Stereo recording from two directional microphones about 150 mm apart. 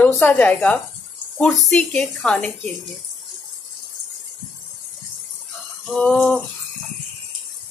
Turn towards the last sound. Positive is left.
turn(degrees=5)  # may be behind; listen again after turning